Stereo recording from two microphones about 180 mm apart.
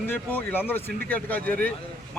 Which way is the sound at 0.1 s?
10° left (ahead or behind).